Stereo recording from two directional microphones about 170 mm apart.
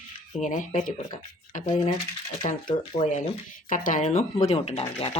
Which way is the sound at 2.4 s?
50° left (ahead or behind).